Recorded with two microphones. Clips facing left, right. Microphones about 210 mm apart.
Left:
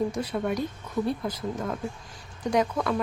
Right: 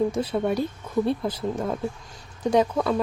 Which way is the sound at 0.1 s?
25° right (ahead or behind).